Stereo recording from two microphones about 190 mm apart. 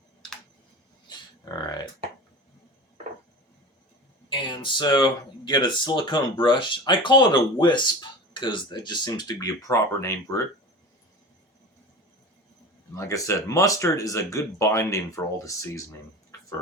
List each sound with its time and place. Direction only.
1.1 s a sound: 25° left (ahead or behind)
1.5 s speech: 20° left (ahead or behind)
4.3 s speech: 25° left (ahead or behind)
12.9 s speech: 15° left (ahead or behind)